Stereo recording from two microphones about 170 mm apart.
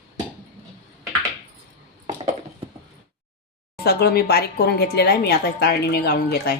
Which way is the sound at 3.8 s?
70° left (ahead or behind).